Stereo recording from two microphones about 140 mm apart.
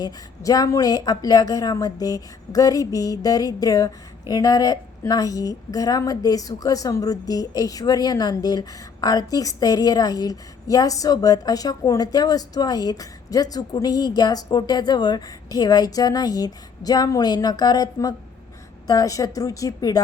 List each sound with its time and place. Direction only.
0.0 s a woman's voice: 25° left (ahead or behind)